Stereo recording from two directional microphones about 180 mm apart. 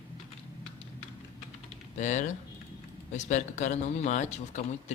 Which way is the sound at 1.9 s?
45° left (ahead or behind).